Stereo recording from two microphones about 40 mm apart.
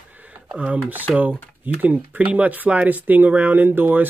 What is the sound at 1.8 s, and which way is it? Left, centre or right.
Speech, right.